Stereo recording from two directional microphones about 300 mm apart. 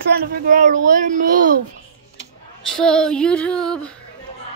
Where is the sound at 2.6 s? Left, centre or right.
Centre.